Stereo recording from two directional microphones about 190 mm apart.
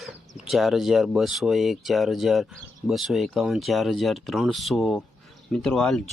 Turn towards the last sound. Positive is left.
turn(degrees=5)  # may be behind; listen again after turning